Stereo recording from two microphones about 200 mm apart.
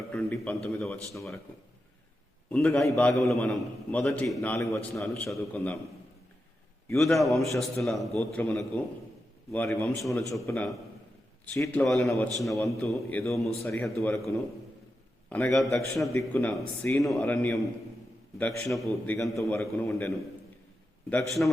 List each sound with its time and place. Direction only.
0.1 s a man's voice: 5° left (ahead or behind)
2.5 s a man's voice: 5° left (ahead or behind)
6.8 s a man's voice: centre (ahead or behind)
12.5 s a man's voice: 15° left (ahead or behind)
15.3 s a man's voice: 5° left (ahead or behind)
21.4 s a man's voice: 5° left (ahead or behind)